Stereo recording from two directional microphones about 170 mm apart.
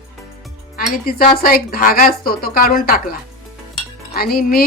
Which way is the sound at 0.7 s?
60° left (ahead or behind).